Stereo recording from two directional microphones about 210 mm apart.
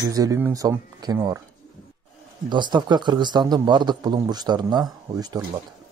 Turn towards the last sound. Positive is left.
turn(degrees=-20)  # may be behind; listen again after turning